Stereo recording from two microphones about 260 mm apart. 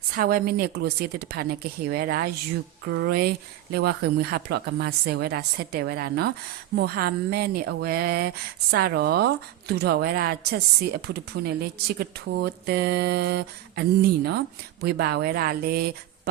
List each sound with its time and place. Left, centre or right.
0.1 s speech: right